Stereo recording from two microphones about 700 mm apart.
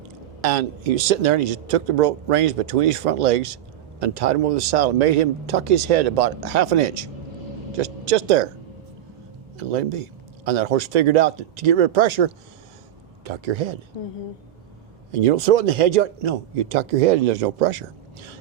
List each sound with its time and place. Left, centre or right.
0.4 s a man's voice: right
9.6 s speech: right
15.1 s a man's voice: right